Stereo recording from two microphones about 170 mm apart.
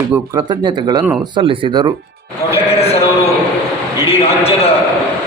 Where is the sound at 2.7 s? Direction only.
35° left (ahead or behind).